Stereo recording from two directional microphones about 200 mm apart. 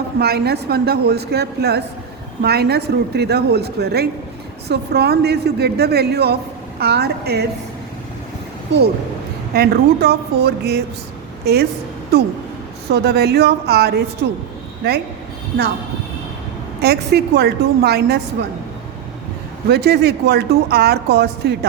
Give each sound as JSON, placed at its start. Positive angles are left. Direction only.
{"t": 0.2, "sound": "a woman's voice", "side_deg": -50}
{"t": 9.6, "sound": "a woman's voice", "side_deg": -55}
{"t": 16.8, "sound": "a woman's voice", "side_deg": -55}
{"t": 19.6, "sound": "a woman's voice", "side_deg": -55}